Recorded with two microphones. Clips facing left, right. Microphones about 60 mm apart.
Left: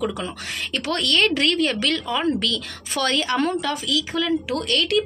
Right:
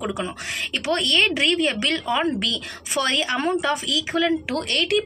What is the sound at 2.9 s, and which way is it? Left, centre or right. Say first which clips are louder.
A woman's voice: left 1 dB; centre.